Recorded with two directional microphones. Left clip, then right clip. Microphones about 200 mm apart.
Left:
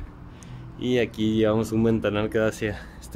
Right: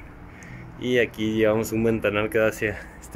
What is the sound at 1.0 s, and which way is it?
Speech, 20° left (ahead or behind).